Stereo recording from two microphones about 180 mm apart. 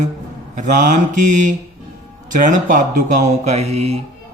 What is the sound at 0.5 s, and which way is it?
A man's voice, 45° right (ahead or behind).